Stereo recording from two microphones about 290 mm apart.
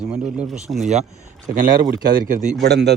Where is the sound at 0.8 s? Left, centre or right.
Right.